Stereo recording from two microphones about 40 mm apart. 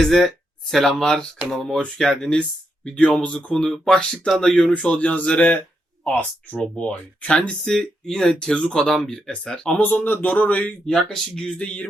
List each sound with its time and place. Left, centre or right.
0.0 s speech: centre
2.3 s speech: left
3.2 s speech: left
3.6 s speech: centre
3.9 s speech: left
6.7 s speech: left
7.6 s speech: centre
9.3 s speech: left
9.7 s a man's voice: left
10.8 s speech: centre
11.4 s speech: left